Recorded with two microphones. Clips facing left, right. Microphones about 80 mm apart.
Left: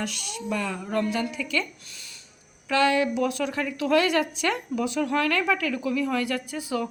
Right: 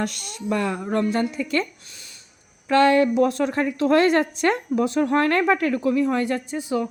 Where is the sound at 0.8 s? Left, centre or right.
Right.